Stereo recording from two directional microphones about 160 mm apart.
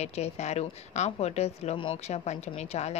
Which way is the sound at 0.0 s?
45° left (ahead or behind).